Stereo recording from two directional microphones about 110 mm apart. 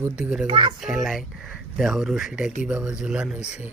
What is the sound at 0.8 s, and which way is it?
Speech, centre (ahead or behind).